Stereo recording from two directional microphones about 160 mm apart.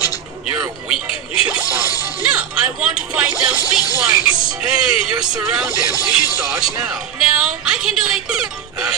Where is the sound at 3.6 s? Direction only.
20° left (ahead or behind).